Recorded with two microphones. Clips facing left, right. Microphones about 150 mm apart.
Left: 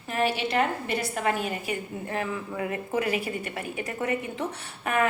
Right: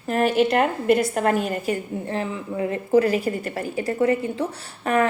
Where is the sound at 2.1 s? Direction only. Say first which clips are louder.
Right 2 dB; 30° right (ahead or behind).